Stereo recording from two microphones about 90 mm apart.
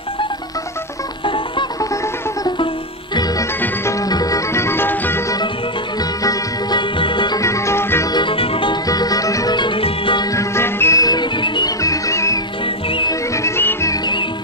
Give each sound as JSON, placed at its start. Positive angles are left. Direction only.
{"t": 1.2, "sound": "music", "side_deg": 70}
{"t": 4.0, "sound": "music", "side_deg": 40}
{"t": 4.5, "sound": "music", "side_deg": 30}
{"t": 5.9, "sound": "music", "side_deg": 50}
{"t": 7.0, "sound": "music", "side_deg": 65}
{"t": 7.3, "sound": "music", "side_deg": 35}
{"t": 8.1, "sound": "music", "side_deg": 65}
{"t": 8.8, "sound": "music", "side_deg": 45}
{"t": 9.6, "sound": "music", "side_deg": 80}
{"t": 10.3, "sound": "music", "side_deg": 30}
{"t": 11.0, "sound": "music", "side_deg": 50}
{"t": 11.8, "sound": "music", "side_deg": 35}
{"t": 12.6, "sound": "music", "side_deg": 70}
{"t": 13.3, "sound": "music", "side_deg": 30}